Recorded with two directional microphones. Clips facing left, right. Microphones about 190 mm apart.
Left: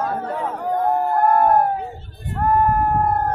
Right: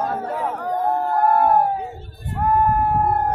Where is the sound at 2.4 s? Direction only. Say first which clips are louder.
Left 1 dB; centre (ahead or behind).